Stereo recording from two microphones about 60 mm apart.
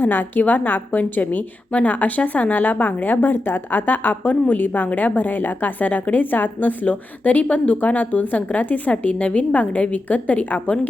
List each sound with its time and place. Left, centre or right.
0.0 s a woman's voice: left